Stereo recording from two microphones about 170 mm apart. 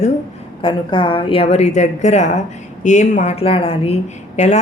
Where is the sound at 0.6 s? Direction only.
30° left (ahead or behind).